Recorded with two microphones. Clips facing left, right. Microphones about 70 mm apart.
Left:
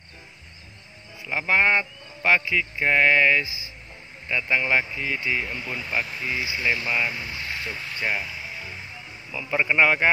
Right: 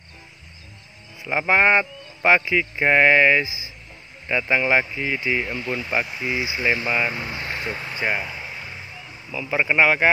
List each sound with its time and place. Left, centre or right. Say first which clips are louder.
1.2 s speech: right 3 dB; right; by 5.9 s centre
5.9 s speech: right 1 dB; centre